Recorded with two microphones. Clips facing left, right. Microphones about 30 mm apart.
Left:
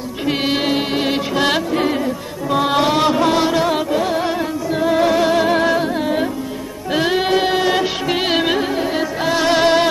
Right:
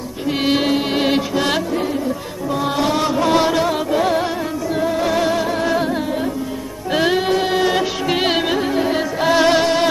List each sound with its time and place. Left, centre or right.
0.5 s music: centre
1.3 s music: centre
2.5 s music: left
2.8 s music: left
3.3 s music: centre
5.0 s music: centre
5.4 s music: left
6.9 s music: centre
7.2 s music: centre
9.6 s music: centre